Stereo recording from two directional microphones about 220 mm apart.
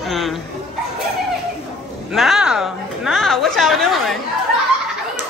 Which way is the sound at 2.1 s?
Centre (ahead or behind).